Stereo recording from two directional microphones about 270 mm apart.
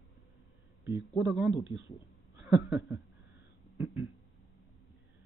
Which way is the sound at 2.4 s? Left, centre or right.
Centre.